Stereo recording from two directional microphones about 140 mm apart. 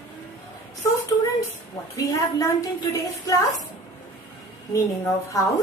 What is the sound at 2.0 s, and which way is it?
A woman's voice, 25° left (ahead or behind).